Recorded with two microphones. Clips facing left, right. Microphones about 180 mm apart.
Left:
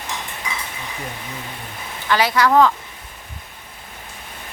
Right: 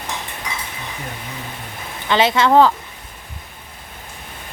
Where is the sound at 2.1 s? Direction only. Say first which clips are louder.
Right 2 dB; 25° right (ahead or behind).